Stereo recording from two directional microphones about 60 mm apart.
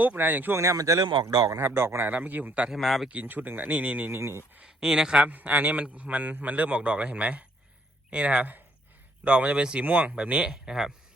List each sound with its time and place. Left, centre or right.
0.0 s speech: right
0.5 s a man's voice: right
0.8 s speech: right
1.6 s a man's voice: right
2.1 s speech: right
2.6 s speech: centre
3.1 s speech: right
4.1 s a man's voice: right
4.6 s speech: centre
5.3 s speech: right; by 10.9 s centre